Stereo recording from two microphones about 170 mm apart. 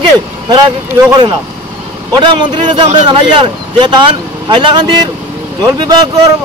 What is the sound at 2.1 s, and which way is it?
Speech, 25° right (ahead or behind).